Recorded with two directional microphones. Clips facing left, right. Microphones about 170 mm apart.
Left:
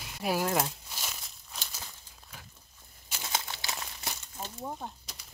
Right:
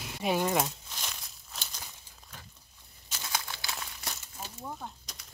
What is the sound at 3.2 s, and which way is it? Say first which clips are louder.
Crumpling: left 1 dB; 25° left (ahead or behind).